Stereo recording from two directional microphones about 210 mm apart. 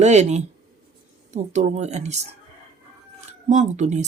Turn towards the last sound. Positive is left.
turn(degrees=-35)  # may be behind; listen again after turning